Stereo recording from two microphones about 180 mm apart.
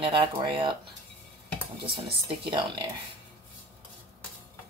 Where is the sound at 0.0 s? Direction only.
30° right (ahead or behind).